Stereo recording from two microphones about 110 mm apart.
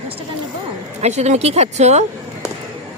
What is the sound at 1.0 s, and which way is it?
Speech, 90° right.